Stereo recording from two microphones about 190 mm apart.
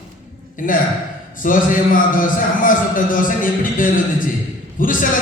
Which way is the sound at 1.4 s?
45° left (ahead or behind).